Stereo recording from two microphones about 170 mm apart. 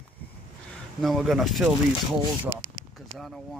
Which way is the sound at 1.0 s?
Centre (ahead or behind).